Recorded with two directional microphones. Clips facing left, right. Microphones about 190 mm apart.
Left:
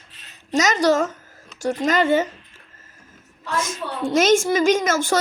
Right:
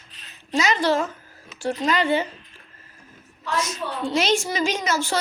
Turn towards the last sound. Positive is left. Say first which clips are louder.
# left 6 dB
turn(degrees=50)  # may be behind; listen again after turning